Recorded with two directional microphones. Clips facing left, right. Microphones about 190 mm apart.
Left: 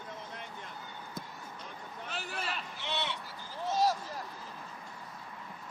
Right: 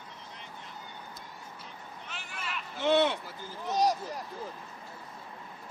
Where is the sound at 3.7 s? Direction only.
15° right (ahead or behind).